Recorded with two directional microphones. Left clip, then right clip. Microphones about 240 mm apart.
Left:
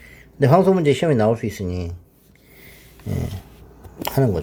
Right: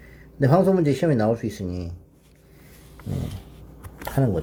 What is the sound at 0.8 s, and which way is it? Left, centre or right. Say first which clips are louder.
Speech: left 4 dB; left.